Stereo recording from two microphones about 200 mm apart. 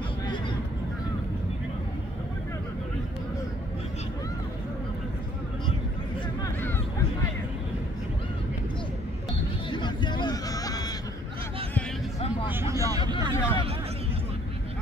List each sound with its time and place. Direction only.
9.7 s hubbub: 20° left (ahead or behind)
12.4 s vehicle: 15° right (ahead or behind)
13.3 s a sound: 15° left (ahead or behind)